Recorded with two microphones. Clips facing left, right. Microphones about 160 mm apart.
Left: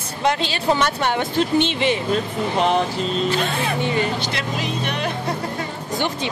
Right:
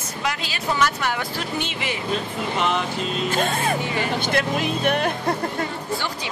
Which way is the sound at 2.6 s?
35° left (ahead or behind).